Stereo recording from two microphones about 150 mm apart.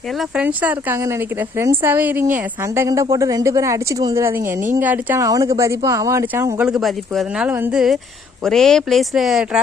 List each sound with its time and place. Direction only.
0.2 s a woman's voice: 10° right (ahead or behind)
6.7 s speech: centre (ahead or behind)
7.5 s speech: 15° right (ahead or behind)
8.4 s speech: centre (ahead or behind)